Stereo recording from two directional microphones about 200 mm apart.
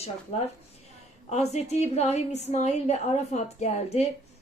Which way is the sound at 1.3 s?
35° left (ahead or behind).